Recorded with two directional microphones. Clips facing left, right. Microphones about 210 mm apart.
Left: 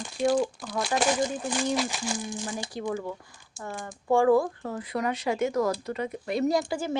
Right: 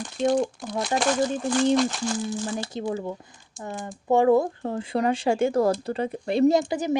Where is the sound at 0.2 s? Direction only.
20° right (ahead or behind).